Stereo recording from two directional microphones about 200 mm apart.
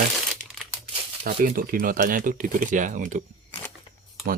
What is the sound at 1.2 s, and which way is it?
Speech, 50° right (ahead or behind).